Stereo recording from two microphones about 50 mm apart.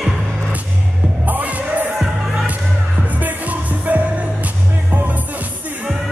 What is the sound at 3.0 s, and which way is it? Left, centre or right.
Music, right.